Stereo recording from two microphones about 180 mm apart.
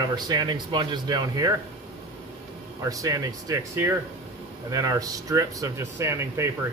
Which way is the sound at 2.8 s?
20° right (ahead or behind).